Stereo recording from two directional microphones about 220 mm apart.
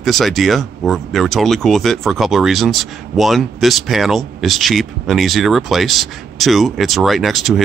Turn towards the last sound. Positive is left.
turn(degrees=0)  # may be behind; listen again after turning